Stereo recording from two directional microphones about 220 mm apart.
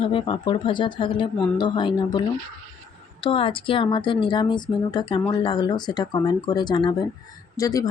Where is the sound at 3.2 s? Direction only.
25° left (ahead or behind).